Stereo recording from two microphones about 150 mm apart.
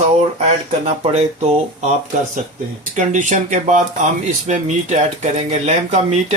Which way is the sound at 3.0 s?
55° right (ahead or behind).